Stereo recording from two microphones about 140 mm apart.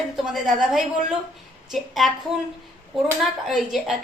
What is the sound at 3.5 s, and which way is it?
Speech, centre (ahead or behind).